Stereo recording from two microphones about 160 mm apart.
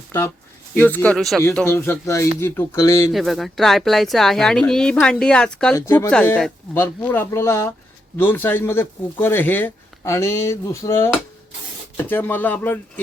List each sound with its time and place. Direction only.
0.7 s speech: 10° left (ahead or behind)
3.1 s speech: centre (ahead or behind)
5.7 s speech: 20° left (ahead or behind)